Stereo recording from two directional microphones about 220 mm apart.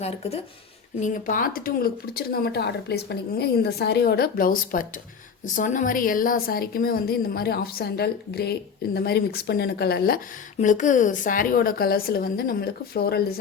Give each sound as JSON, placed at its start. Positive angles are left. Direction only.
{"t": 0.0, "sound": "speech", "side_deg": 25}
{"t": 10.6, "sound": "a woman's voice", "side_deg": 35}